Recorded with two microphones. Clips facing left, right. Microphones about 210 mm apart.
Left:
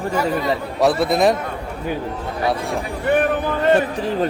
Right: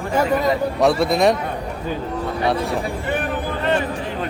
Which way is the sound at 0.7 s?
Centre (ahead or behind).